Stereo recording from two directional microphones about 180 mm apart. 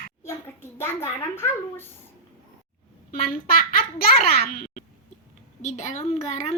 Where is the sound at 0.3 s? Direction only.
15° left (ahead or behind).